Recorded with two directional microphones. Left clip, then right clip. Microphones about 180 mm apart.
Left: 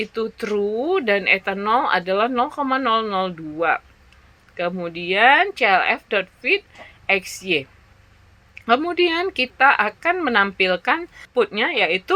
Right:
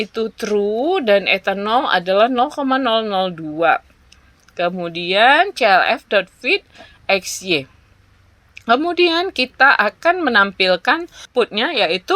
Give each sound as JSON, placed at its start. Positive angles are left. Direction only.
{"t": 0.0, "sound": "speech", "side_deg": -40}